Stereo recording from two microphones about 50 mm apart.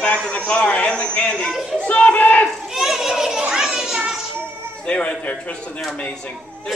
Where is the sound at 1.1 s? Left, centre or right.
Centre.